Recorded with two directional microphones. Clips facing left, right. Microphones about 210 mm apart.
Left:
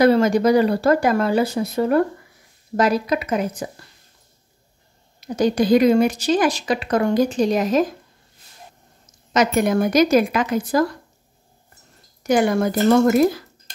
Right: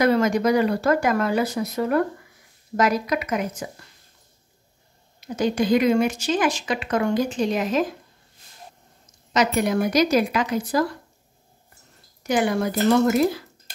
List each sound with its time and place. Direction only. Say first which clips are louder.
0.0 s speech: left 4 dB; 30° left (ahead or behind)
5.2 s speech: left 4 dB; 40° left (ahead or behind)
9.3 s speech: left 3 dB; 50° left (ahead or behind)
12.2 s speech: left 4 dB; 45° left (ahead or behind)
13.7 s a sound: even; 5° right (ahead or behind)